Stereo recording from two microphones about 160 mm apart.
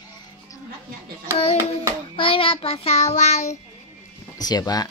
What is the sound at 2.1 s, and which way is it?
Child singing, 35° left (ahead or behind).